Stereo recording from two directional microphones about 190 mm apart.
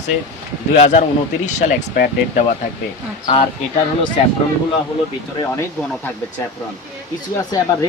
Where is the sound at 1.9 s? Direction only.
50° left (ahead or behind).